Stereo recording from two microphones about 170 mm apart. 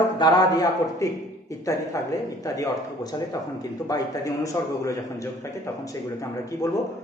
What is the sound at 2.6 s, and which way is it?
A man's voice, 25° left (ahead or behind).